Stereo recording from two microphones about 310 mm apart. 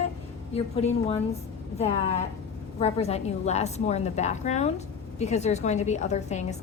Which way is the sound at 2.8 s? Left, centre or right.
Centre.